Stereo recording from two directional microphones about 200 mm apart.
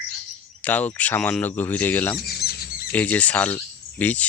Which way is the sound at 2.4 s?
50° left (ahead or behind).